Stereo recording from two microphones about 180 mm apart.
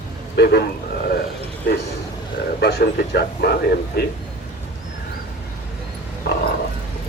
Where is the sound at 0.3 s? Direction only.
65° left (ahead or behind).